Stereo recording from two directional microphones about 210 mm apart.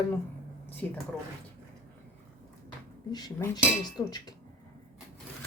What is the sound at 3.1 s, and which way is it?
Speech, 20° left (ahead or behind).